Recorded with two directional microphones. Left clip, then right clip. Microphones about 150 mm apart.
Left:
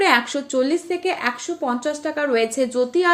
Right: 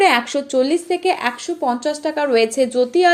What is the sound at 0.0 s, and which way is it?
Speech, 25° right (ahead or behind).